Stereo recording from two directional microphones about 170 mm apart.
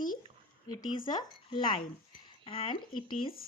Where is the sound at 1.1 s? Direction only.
25° left (ahead or behind).